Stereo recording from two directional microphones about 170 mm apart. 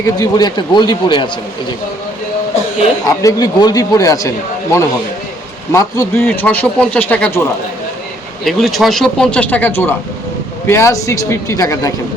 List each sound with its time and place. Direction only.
0.0 s speech: 20° left (ahead or behind)
3.1 s speech: 20° left (ahead or behind)
5.7 s a man's voice: 20° left (ahead or behind)
8.4 s speech: centre (ahead or behind); by 11.9 s 20° left (ahead or behind)